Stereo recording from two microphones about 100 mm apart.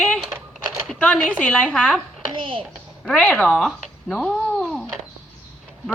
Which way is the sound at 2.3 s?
60° right (ahead or behind).